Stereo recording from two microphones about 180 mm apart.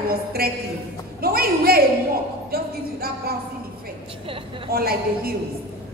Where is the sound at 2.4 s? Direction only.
60° right (ahead or behind).